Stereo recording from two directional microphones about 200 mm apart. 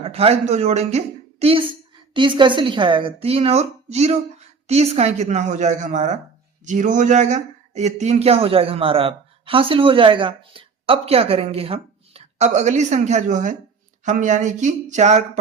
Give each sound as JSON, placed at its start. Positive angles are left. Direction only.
{"t": 0.0, "sound": "a woman's voice", "side_deg": -30}